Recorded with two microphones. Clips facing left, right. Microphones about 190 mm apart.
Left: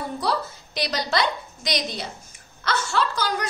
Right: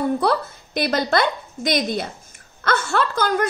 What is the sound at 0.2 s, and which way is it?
A woman's voice, 55° right (ahead or behind).